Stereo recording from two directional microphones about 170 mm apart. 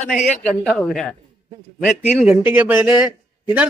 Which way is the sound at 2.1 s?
5° right (ahead or behind).